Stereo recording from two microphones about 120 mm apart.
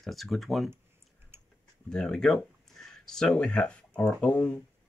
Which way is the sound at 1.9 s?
5° left (ahead or behind).